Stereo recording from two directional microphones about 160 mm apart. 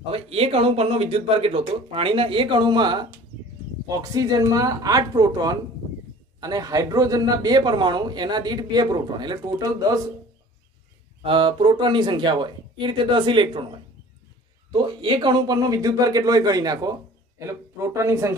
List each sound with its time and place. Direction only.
0.1 s a man's voice: 40° right (ahead or behind)
11.2 s speech: 35° right (ahead or behind)
14.7 s a man's voice: 30° right (ahead or behind)